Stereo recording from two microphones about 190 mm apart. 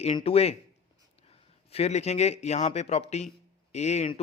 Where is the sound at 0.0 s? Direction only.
30° left (ahead or behind).